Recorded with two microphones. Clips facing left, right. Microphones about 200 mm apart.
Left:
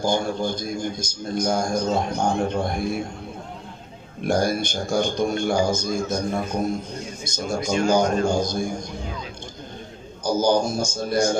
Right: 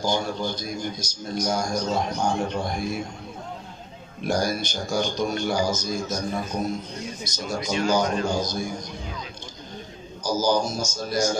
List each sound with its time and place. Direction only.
0.0 s a man's voice: 50° left (ahead or behind)
4.3 s a man's voice: 55° left (ahead or behind)
10.2 s speech: 55° left (ahead or behind)